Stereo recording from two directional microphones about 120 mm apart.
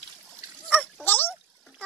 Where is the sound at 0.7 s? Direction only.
15° left (ahead or behind).